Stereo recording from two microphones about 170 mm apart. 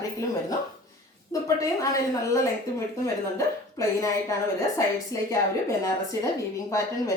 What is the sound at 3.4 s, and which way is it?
Speech, 20° left (ahead or behind).